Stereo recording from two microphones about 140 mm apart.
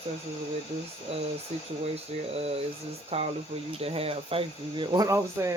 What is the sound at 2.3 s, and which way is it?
Speech, 45° right (ahead or behind).